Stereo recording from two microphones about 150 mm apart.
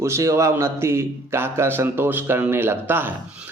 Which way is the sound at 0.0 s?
20° right (ahead or behind).